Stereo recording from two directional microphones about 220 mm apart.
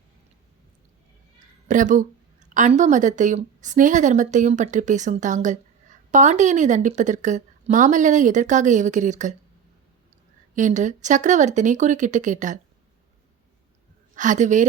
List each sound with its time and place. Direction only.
1.6 s a woman's voice: 35° right (ahead or behind)
10.5 s a woman's voice: 35° right (ahead or behind)
14.2 s a woman's voice: 35° right (ahead or behind)